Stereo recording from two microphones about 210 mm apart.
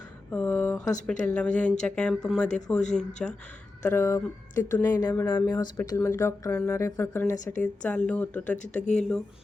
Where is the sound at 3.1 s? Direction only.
35° left (ahead or behind).